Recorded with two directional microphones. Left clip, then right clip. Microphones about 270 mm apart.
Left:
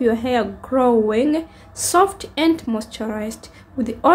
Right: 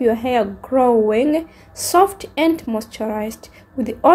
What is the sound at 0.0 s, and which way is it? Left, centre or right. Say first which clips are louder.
Speech: right 2 dB; centre.